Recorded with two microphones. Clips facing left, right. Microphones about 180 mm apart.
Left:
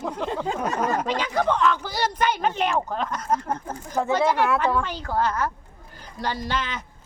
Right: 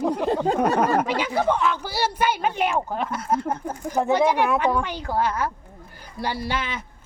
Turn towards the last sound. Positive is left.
turn(degrees=-10)  # may be behind; listen again after turning